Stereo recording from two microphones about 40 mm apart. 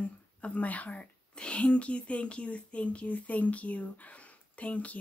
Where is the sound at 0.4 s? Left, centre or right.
Left.